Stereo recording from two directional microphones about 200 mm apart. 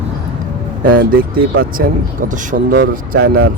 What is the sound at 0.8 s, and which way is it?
Speech, 45° right (ahead or behind).